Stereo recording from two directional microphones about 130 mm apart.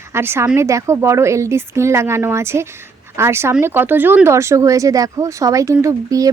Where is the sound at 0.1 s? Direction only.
20° right (ahead or behind).